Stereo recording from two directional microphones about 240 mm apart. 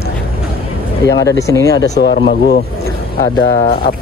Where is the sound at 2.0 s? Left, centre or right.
Left.